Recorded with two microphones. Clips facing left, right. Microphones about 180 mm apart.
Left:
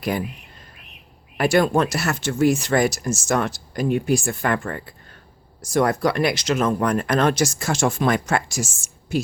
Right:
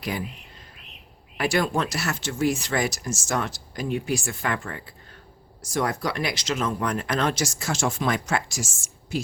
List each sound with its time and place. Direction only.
0.0 s speech: 55° left (ahead or behind)
1.4 s speech: 50° left (ahead or behind)